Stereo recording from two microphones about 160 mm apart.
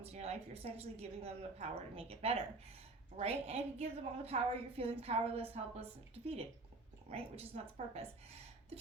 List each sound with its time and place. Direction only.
0.0 s a woman's voice: 40° right (ahead or behind)